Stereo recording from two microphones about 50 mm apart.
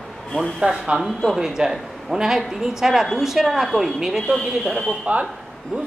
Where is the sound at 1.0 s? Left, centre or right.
Centre.